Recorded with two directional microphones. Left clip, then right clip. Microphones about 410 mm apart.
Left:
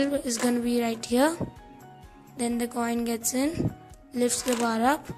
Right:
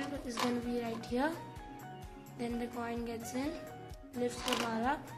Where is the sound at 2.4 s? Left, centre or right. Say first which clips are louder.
Left 10 dB; centre.